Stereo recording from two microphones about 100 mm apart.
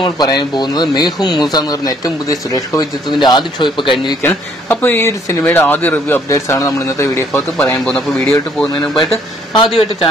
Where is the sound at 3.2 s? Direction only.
50° left (ahead or behind).